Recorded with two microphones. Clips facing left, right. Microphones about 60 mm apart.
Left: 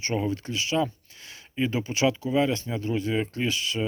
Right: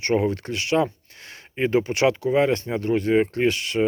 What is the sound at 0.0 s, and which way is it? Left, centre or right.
Speech, right.